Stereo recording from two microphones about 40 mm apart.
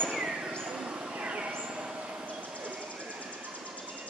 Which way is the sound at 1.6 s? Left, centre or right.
Right.